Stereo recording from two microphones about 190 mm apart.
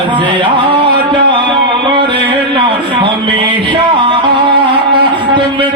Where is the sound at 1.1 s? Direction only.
25° right (ahead or behind).